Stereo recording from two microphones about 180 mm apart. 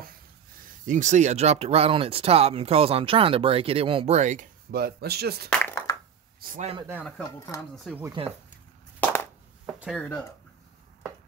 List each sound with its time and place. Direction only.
0.7 s speech: 45° right (ahead or behind)
4.6 s speech: 60° right (ahead or behind)
5.5 s a sound: 10° left (ahead or behind)
6.4 s a man's voice: 45° right (ahead or behind)
7.2 s speech: 20° left (ahead or behind)
7.7 s speech: centre (ahead or behind)
9.7 s a sound: 5° right (ahead or behind)
9.9 s speech: 10° left (ahead or behind)